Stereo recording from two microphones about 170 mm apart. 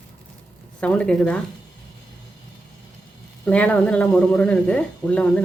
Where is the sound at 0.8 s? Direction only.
5° left (ahead or behind).